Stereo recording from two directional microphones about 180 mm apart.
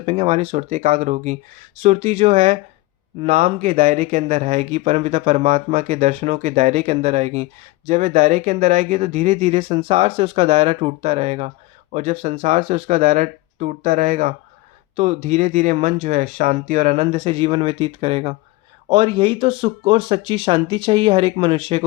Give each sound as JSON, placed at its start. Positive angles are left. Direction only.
{"t": 0.0, "sound": "speech", "side_deg": -35}